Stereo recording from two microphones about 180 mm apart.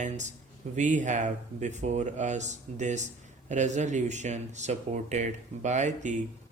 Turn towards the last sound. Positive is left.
turn(degrees=-40)  # may be behind; listen again after turning